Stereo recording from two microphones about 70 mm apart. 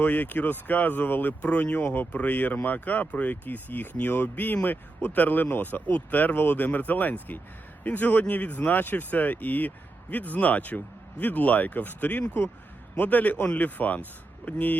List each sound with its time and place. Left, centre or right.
0.0 s speech: left